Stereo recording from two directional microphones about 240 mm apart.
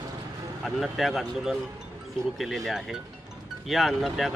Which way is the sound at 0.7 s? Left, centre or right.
Centre.